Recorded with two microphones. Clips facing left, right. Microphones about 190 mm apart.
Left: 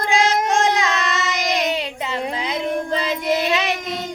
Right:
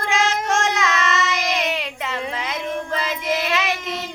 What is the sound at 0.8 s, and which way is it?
Child singing, 35° left (ahead or behind).